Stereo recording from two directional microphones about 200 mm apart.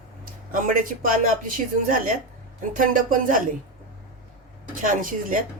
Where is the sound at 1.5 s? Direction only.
45° right (ahead or behind).